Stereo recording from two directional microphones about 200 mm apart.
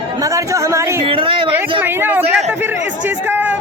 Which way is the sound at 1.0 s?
25° right (ahead or behind).